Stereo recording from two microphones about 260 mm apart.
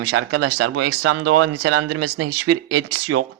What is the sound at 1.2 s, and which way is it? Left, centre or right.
Speech, right.